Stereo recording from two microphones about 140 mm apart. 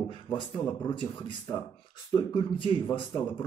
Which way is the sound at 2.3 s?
35° left (ahead or behind).